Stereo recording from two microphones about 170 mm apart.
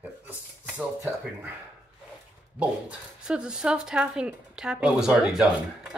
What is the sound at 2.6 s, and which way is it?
Speech, 5° right (ahead or behind).